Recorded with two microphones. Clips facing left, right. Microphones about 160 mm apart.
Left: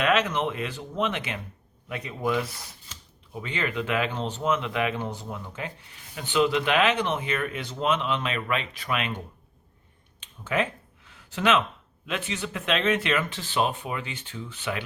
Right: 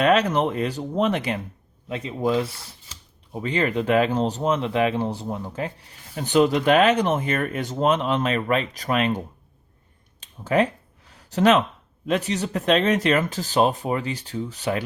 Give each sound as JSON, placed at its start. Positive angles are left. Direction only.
{"t": 0.0, "sound": "speech", "side_deg": -35}
{"t": 1.9, "sound": "speech", "side_deg": -25}
{"t": 10.2, "sound": "a sound", "side_deg": -40}
{"t": 12.0, "sound": "speech", "side_deg": -40}